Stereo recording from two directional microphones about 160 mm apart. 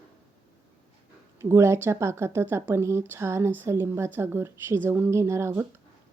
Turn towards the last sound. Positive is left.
turn(degrees=-15)  # may be behind; listen again after turning